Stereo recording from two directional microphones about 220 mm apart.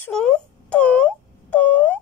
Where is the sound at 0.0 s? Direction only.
5° left (ahead or behind).